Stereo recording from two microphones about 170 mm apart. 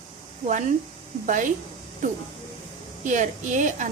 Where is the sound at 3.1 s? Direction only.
45° right (ahead or behind).